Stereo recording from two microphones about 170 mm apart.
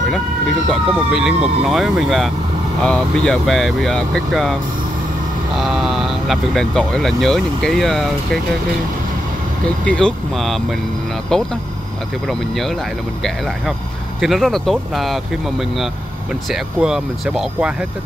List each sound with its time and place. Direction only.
0.7 s speech: 5° right (ahead or behind)
5.6 s speech: centre (ahead or behind)
9.8 s speech: 5° left (ahead or behind)
14.2 s speech: centre (ahead or behind)
16.4 s speech: 5° right (ahead or behind)